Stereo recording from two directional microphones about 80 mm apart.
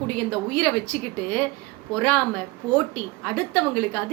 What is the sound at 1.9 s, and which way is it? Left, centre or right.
A woman's voice, centre.